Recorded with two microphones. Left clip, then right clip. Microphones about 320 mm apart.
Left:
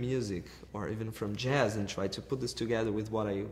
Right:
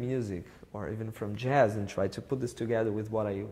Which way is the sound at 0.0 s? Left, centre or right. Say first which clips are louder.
Even; right.